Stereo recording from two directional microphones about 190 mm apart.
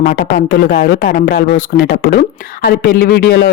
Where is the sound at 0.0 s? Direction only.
50° left (ahead or behind).